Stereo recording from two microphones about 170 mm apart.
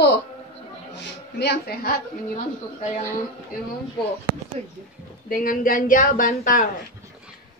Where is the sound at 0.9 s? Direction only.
85° left; by 1.9 s 70° left (ahead or behind).